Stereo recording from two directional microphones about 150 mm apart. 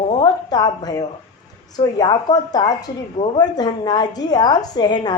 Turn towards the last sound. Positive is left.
turn(degrees=30)  # may be behind; listen again after turning